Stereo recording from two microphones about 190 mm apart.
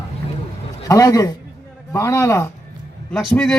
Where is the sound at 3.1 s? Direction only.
5° left (ahead or behind).